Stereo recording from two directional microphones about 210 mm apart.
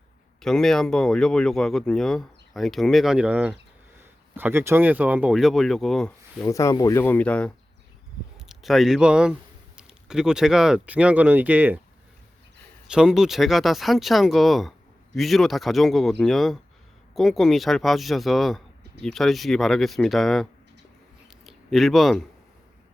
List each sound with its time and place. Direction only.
0.4 s speech: centre (ahead or behind)
6.4 s speech: 15° left (ahead or behind); by 11.8 s 5° right (ahead or behind)
12.9 s speech: 5° right (ahead or behind)